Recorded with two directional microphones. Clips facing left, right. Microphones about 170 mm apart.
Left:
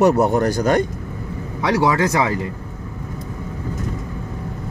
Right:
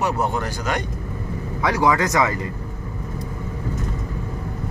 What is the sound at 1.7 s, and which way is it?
Speech, 25° left (ahead or behind).